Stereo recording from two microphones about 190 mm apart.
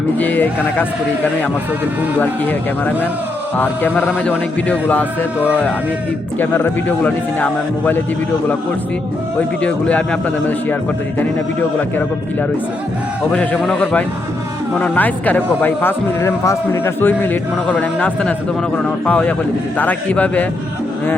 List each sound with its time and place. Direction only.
0.2 s speech: 10° left (ahead or behind)
9.6 s speech: 5° left (ahead or behind)
11.8 s speech: 10° left (ahead or behind)